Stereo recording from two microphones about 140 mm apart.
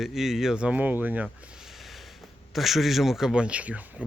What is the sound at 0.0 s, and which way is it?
Speech, centre (ahead or behind).